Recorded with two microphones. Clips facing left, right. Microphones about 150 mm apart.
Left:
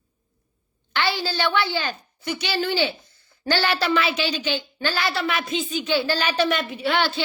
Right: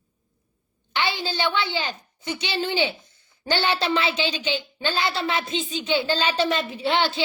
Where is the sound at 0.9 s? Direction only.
20° right (ahead or behind).